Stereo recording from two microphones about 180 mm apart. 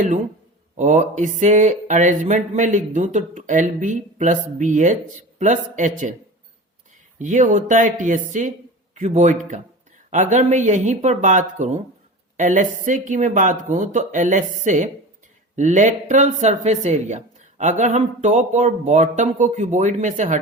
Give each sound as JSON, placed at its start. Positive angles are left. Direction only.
{"t": 0.8, "sound": "speech", "side_deg": -40}
{"t": 7.2, "sound": "speech", "side_deg": -45}